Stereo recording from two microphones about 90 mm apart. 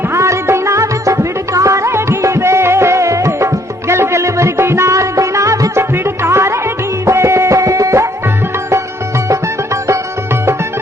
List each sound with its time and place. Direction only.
0.1 s music: 30° right (ahead or behind)